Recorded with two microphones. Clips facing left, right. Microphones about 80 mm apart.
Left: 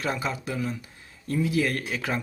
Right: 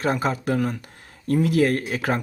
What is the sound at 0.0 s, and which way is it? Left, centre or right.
Speech, right.